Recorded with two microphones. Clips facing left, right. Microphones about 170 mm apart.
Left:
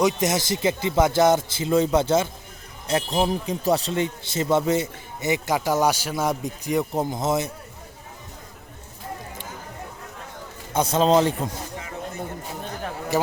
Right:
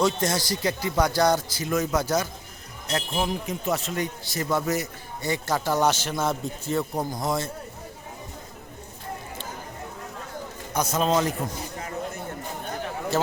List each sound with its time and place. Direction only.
0.0 s speech: 20° left (ahead or behind)
10.8 s speech: 30° left (ahead or behind)
13.1 s speech: 15° left (ahead or behind)